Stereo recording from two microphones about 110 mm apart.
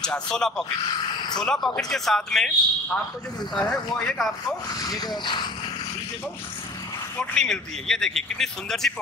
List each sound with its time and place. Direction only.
0.0 s a man's voice: 5° left (ahead or behind)
4.7 s speech: 35° left (ahead or behind)
7.2 s a man's voice: 5° left (ahead or behind)